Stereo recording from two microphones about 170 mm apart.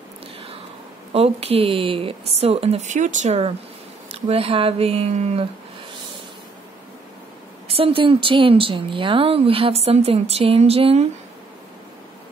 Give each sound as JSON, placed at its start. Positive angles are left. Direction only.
{"t": 1.1, "sound": "a woman's voice", "side_deg": -35}
{"t": 7.6, "sound": "a woman's voice", "side_deg": -35}